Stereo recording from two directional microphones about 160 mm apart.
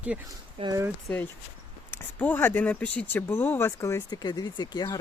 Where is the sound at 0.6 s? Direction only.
20° right (ahead or behind).